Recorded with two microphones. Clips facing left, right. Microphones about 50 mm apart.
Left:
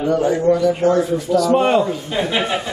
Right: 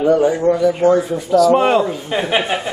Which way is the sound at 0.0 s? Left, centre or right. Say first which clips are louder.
Right 3 dB; centre.